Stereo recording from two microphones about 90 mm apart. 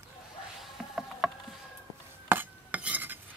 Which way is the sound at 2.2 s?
20° right (ahead or behind).